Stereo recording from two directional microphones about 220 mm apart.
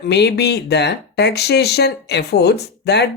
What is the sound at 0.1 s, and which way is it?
Speech, 50° left (ahead or behind).